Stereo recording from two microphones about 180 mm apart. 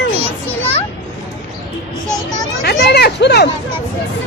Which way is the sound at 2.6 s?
65° left (ahead or behind).